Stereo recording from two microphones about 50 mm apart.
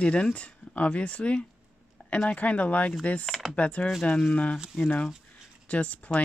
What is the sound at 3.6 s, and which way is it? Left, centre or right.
Speech, left.